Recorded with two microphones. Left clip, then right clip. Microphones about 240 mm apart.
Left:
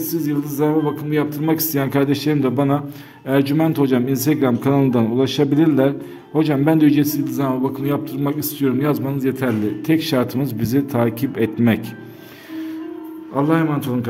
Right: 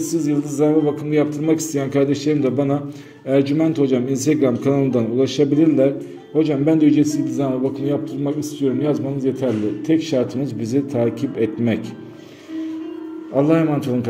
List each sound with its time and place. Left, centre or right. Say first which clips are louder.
0.0 s a man's voice: right 2 dB; centre
13.4 s a man's voice: right 2 dB; centre